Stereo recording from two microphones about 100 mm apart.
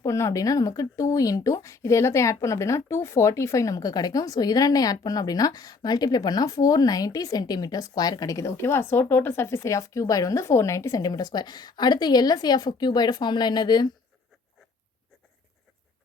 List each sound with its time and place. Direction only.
0.0 s speech: 30° left (ahead or behind); by 13.9 s 45° left (ahead or behind)